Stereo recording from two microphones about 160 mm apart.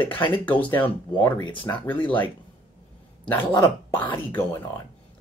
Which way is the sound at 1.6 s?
10° left (ahead or behind).